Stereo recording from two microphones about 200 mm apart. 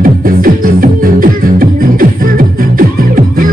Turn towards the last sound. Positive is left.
turn(degrees=-45)  # may be behind; listen again after turning